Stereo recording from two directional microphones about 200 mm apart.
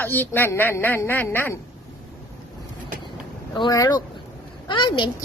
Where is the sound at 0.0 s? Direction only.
10° left (ahead or behind).